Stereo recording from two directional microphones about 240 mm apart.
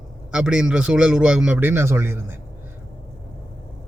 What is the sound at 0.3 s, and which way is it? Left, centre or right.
A man's voice, centre.